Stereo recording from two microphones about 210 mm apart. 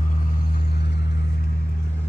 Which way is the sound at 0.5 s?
50° left (ahead or behind).